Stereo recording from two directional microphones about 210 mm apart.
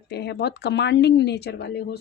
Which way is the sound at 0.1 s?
50° left (ahead or behind).